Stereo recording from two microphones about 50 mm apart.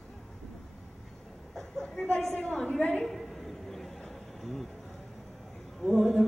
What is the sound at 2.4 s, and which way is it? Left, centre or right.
Female singing, centre.